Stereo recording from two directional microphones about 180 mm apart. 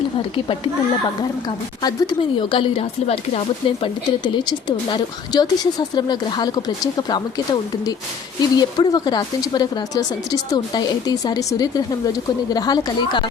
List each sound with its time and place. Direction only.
0.2 s speech: 30° left (ahead or behind)
1.8 s speech: 25° left (ahead or behind)